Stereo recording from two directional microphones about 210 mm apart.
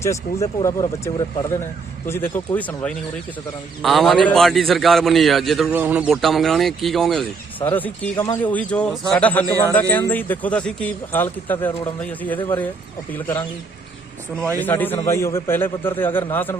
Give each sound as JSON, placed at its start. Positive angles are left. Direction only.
{"t": 0.0, "sound": "a man's voice", "side_deg": 15}
{"t": 13.1, "sound": "speech", "side_deg": 10}
{"t": 14.6, "sound": "speech", "side_deg": 10}